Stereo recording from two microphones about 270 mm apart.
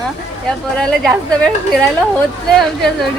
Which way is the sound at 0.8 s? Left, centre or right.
Centre.